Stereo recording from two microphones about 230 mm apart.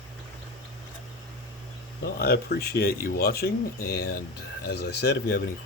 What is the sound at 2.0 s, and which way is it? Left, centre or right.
Speech, left.